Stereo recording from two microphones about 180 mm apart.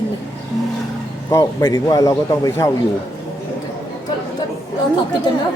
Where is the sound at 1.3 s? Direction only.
15° left (ahead or behind).